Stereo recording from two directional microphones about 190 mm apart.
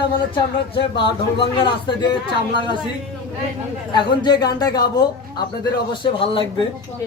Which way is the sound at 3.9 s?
25° left (ahead or behind).